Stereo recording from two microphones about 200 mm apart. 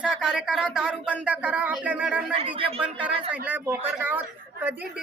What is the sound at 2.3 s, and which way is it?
Speech, 25° right (ahead or behind).